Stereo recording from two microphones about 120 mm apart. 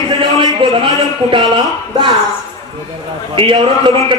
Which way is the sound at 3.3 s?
45° right (ahead or behind).